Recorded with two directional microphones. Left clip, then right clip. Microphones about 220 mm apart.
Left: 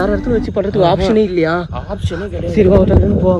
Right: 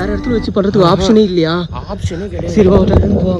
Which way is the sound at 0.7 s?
20° right (ahead or behind).